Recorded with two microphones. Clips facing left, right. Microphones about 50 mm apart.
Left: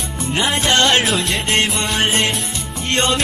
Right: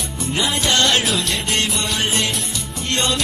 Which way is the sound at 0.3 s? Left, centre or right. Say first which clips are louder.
Left 3 dB; left.